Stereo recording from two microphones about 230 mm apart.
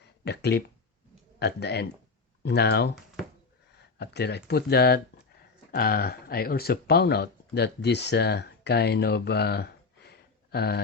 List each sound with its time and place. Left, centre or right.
0.3 s speech: left
3.9 s speech: left